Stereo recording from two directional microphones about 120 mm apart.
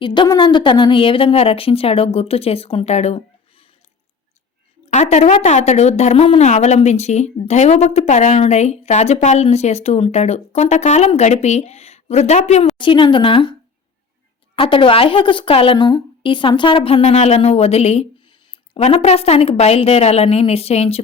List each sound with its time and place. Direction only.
0.0 s a woman's voice: 40° left (ahead or behind); by 3.2 s 65° left (ahead or behind)
4.9 s speech: 70° left (ahead or behind)
6.5 s speech: 70° left (ahead or behind)
12.8 s a woman's voice: 45° left (ahead or behind)